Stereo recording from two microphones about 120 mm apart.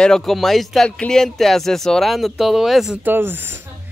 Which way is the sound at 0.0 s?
5° left (ahead or behind).